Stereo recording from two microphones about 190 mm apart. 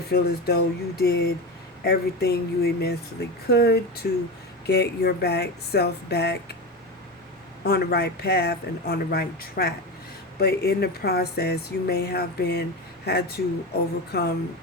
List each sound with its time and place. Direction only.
0.1 s speech: 55° left (ahead or behind)
7.6 s speech: 55° left (ahead or behind)